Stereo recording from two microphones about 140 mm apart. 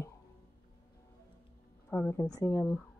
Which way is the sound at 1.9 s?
15° left (ahead or behind).